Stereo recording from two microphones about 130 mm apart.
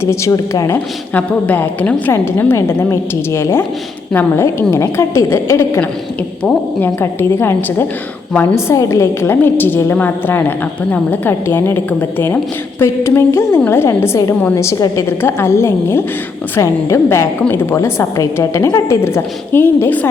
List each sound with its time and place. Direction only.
0.0 s a woman's voice: 20° left (ahead or behind)
1.1 s a woman's voice: 15° left (ahead or behind)